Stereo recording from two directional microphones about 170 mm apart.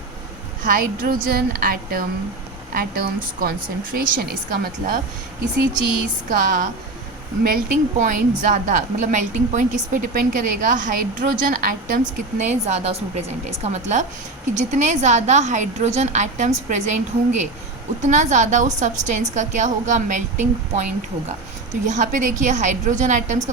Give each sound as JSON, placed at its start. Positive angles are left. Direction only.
{"t": 0.6, "sound": "a woman's voice", "side_deg": -55}
{"t": 6.3, "sound": "a woman's voice", "side_deg": -50}
{"t": 12.4, "sound": "a woman's voice", "side_deg": -40}